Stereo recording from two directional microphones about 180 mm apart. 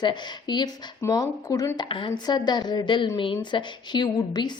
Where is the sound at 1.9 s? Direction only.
30° left (ahead or behind).